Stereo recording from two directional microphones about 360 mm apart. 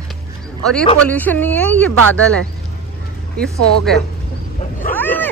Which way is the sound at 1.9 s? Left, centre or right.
Right.